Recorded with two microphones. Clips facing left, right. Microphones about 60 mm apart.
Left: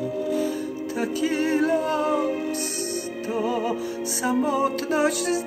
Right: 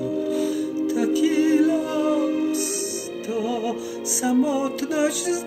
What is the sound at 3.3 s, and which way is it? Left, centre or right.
Music, left.